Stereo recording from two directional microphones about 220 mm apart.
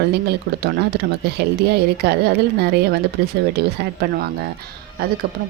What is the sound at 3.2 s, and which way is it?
A woman's voice, 45° right (ahead or behind).